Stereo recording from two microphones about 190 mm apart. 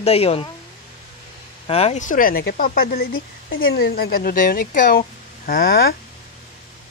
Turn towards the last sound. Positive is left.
turn(degrees=50)  # may be behind; listen again after turning